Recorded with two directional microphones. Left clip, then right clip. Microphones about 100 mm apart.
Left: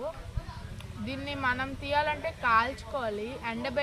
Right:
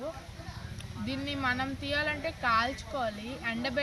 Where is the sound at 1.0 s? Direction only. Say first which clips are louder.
Left 1 dB; 20° left (ahead or behind).